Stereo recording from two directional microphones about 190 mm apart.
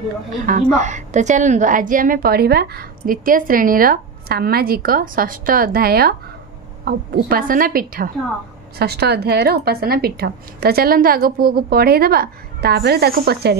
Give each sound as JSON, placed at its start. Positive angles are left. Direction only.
{"t": 0.5, "sound": "a woman's voice", "side_deg": -40}